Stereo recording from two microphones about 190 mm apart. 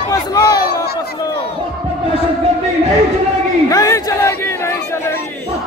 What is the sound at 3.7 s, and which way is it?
Crowd, 15° left (ahead or behind).